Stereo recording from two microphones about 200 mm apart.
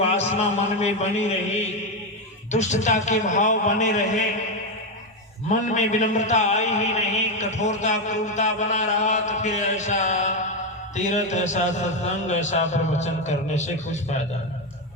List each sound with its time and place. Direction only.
0.0 s a man's voice: 30° left (ahead or behind)
5.5 s a man's voice: 35° left (ahead or behind)